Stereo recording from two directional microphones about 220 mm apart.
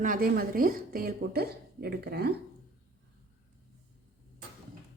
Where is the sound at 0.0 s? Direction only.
40° right (ahead or behind).